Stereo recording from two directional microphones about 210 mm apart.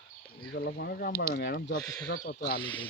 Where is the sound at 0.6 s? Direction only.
50° left (ahead or behind).